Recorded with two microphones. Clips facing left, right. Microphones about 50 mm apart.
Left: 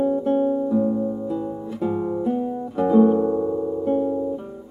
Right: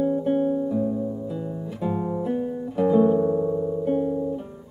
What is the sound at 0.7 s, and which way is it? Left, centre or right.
Music, left.